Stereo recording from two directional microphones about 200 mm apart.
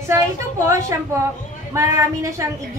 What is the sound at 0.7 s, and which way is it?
A woman's voice, 15° right (ahead or behind).